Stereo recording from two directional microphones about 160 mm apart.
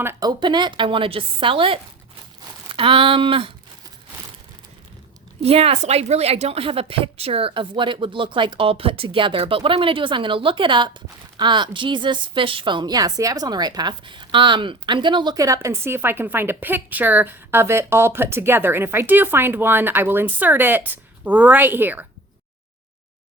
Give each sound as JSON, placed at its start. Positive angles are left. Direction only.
{"t": 0.0, "sound": "speech", "side_deg": -15}
{"t": 0.3, "sound": "a woman's voice", "side_deg": -30}
{"t": 5.4, "sound": "speech", "side_deg": -40}